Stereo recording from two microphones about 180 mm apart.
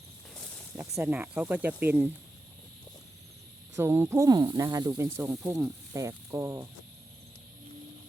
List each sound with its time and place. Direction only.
0.8 s speech: 10° right (ahead or behind)
3.8 s speech: 15° right (ahead or behind)